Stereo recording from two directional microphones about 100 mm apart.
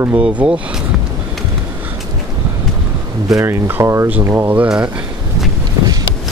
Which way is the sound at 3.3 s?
30° right (ahead or behind).